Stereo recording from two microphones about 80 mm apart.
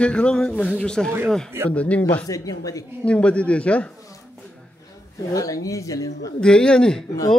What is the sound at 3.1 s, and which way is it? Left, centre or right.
Speech, centre.